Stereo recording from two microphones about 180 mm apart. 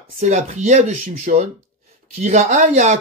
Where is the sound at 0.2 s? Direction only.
40° right (ahead or behind).